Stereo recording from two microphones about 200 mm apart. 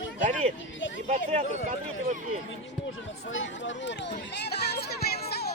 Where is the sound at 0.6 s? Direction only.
65° left (ahead or behind).